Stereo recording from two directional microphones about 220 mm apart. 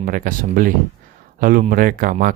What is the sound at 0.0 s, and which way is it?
Speech, 40° right (ahead or behind).